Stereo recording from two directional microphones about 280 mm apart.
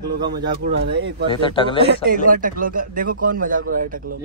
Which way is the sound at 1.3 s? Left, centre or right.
Centre.